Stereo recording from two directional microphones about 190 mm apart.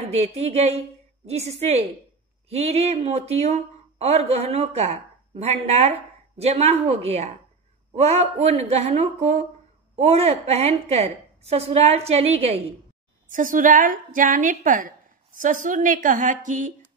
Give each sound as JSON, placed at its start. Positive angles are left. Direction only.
{"t": 0.0, "sound": "a woman's voice", "side_deg": -35}
{"t": 13.3, "sound": "a woman's voice", "side_deg": -45}